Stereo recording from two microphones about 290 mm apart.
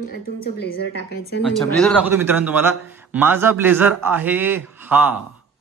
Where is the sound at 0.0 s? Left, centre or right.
Left.